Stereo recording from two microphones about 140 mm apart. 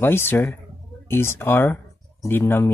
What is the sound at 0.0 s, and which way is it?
Speech, 15° left (ahead or behind).